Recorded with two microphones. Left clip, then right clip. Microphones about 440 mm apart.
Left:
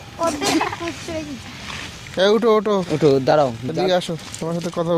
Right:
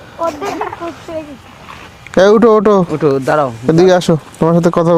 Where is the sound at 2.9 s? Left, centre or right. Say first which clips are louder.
Right 3 dB; right.